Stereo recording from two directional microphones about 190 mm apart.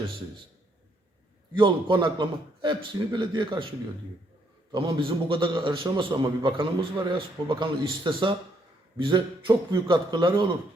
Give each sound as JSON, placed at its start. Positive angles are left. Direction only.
{"t": 1.5, "sound": "a man's voice", "side_deg": -25}
{"t": 4.7, "sound": "a man's voice", "side_deg": -25}